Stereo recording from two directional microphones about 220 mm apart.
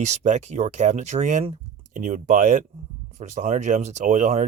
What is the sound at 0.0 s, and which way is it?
Speech, 30° right (ahead or behind).